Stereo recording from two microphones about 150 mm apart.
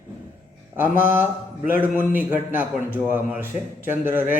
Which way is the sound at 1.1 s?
15° right (ahead or behind).